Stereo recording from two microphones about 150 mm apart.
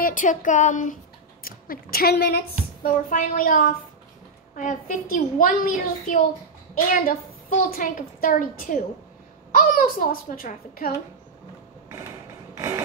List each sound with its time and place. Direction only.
0.0 s a woman's voice: 60° left (ahead or behind)
1.4 s a woman's voice: 80° left
12.5 s a sound: 20° right (ahead or behind)